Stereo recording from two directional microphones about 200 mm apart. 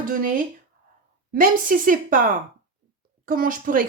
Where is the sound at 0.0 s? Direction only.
45° right (ahead or behind).